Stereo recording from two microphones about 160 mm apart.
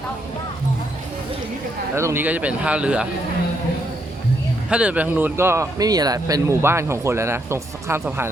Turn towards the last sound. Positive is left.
turn(degrees=-15)  # may be behind; listen again after turning